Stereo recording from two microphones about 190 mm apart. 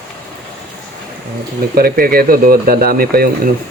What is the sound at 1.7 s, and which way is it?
Speech, 50° right (ahead or behind).